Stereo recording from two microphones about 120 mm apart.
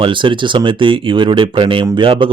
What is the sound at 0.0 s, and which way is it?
Speech, 45° right (ahead or behind).